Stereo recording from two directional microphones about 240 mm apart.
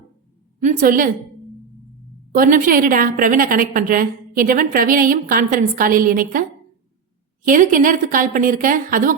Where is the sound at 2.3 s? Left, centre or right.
Right.